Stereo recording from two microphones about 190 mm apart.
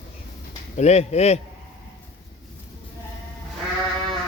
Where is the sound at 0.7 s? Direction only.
35° left (ahead or behind).